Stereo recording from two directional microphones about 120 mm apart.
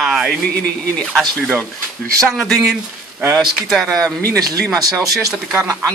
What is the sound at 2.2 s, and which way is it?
A man's voice, centre (ahead or behind).